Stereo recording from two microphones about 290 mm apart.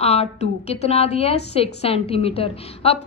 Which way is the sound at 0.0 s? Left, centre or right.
Left.